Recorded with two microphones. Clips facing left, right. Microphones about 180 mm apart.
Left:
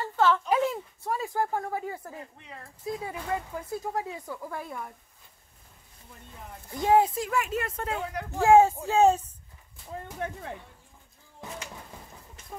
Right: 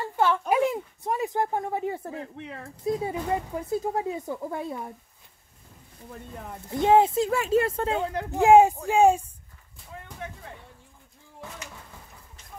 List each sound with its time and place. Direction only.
0.1 s a sound: 15° right (ahead or behind)
0.5 s speech: 15° right (ahead or behind)
2.3 s speech: 75° right (ahead or behind)
3.0 s speech: 25° right (ahead or behind)
6.7 s a woman's voice: 25° right (ahead or behind)
10.2 s speech: 50° left (ahead or behind)